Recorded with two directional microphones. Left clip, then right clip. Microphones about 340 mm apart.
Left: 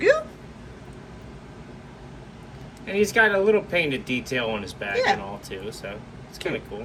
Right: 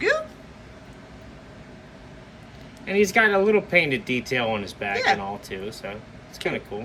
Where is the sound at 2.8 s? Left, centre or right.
Centre.